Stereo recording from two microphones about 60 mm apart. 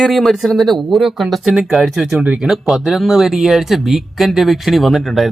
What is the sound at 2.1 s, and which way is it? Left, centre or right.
Speech, right.